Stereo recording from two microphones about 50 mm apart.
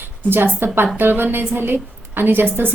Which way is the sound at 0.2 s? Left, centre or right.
Right.